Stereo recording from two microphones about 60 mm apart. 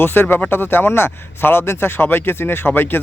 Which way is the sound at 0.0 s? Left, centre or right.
Left.